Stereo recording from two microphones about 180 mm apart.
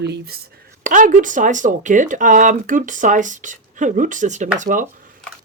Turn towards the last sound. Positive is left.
turn(degrees=-50)  # may be behind; listen again after turning